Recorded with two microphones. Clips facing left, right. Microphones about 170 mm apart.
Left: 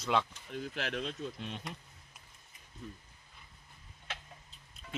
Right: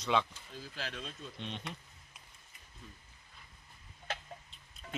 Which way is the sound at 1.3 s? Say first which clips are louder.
Even; 5° left (ahead or behind).